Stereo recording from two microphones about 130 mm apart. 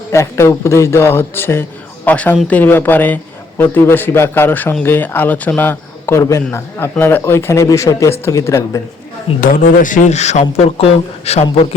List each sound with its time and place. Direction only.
0.1 s speech: 20° left (ahead or behind)
9.4 s a man's voice: 90° left; by 11.4 s 55° left (ahead or behind)